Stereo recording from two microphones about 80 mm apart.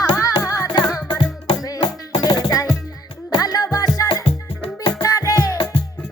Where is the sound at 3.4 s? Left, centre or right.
Left.